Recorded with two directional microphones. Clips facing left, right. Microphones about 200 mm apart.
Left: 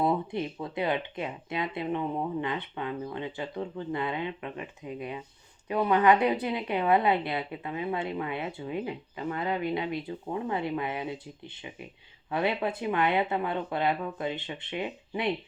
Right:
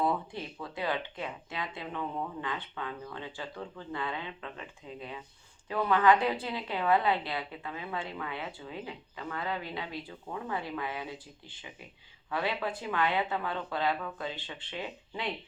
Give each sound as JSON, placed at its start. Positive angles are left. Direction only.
{"t": 0.0, "sound": "speech", "side_deg": 20}